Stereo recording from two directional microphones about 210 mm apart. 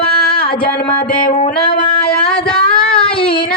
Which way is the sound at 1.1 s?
40° left (ahead or behind).